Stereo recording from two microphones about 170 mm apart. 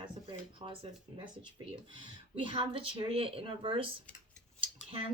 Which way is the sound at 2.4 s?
30° right (ahead or behind).